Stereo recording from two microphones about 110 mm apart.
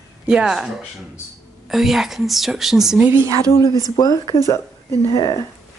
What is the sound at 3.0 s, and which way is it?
Speech, 20° right (ahead or behind).